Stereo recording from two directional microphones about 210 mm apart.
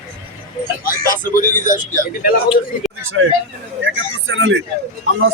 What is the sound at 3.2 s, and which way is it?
Speech, 75° right (ahead or behind).